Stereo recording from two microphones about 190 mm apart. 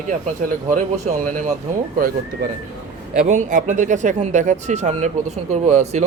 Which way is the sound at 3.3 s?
40° right (ahead or behind).